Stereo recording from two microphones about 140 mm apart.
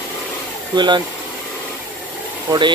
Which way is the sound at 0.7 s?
30° right (ahead or behind).